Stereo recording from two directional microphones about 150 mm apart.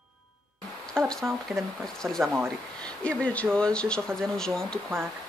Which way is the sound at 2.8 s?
5° left (ahead or behind).